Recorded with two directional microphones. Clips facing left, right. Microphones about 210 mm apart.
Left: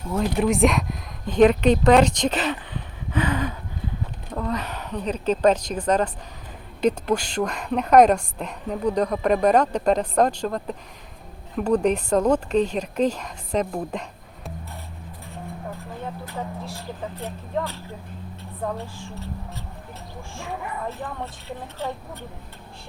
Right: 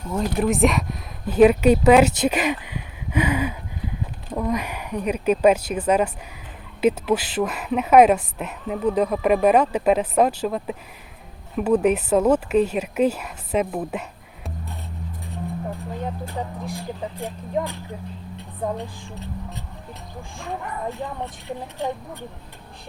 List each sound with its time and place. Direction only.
0.1 s a woman's voice: centre (ahead or behind)
16.6 s a woman's voice: 15° right (ahead or behind)
21.0 s speech: 15° right (ahead or behind)